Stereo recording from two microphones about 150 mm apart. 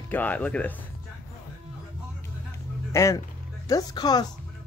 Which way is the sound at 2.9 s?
20° left (ahead or behind).